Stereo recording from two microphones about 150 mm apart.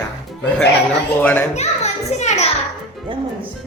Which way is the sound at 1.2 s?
10° left (ahead or behind).